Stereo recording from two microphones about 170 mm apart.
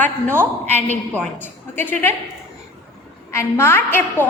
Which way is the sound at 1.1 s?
10° left (ahead or behind).